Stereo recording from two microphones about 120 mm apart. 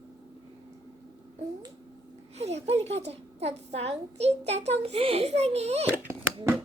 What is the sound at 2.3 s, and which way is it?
A woman's voice, 65° right (ahead or behind).